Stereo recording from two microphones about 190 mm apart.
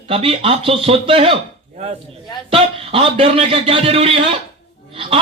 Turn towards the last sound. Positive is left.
turn(degrees=-30)  # may be behind; listen again after turning